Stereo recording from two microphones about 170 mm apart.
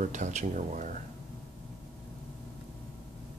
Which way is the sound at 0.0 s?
45° right (ahead or behind).